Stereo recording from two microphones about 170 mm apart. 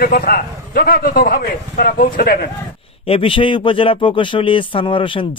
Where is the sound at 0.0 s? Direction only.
60° left (ahead or behind).